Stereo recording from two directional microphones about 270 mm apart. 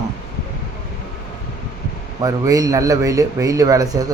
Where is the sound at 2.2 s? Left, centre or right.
Centre.